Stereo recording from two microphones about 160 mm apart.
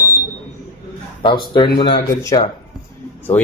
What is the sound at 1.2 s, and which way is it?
Speech, 30° left (ahead or behind).